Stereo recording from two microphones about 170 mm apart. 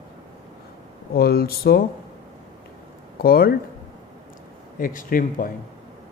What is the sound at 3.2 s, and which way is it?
Speech, 65° left (ahead or behind).